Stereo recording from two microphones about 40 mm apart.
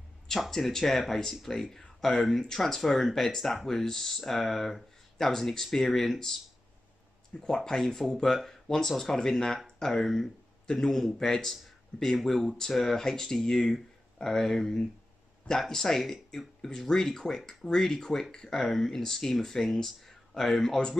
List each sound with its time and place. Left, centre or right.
0.5 s speech: centre
7.3 s speech: centre
12.4 s speech: centre